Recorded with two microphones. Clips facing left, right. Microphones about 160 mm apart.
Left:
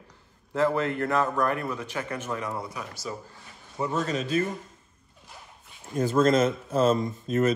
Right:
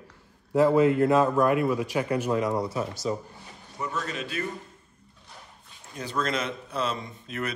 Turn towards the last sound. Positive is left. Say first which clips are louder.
# left 9 dB
turn(degrees=40)  # may be behind; listen again after turning